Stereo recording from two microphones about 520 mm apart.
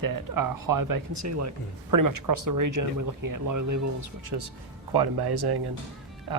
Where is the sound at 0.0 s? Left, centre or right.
Right.